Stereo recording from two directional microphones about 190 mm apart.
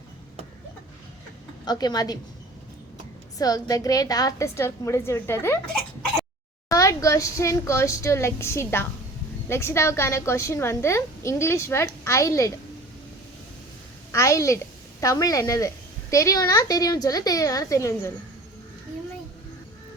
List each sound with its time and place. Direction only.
1.6 s a woman's voice: 20° left (ahead or behind)
3.3 s a woman's voice: 20° left (ahead or behind)
6.7 s a woman's voice: 15° left (ahead or behind)
14.1 s a woman's voice: 15° left (ahead or behind)